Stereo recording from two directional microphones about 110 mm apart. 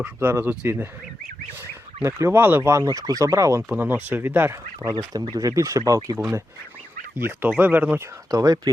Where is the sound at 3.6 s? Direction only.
15° right (ahead or behind).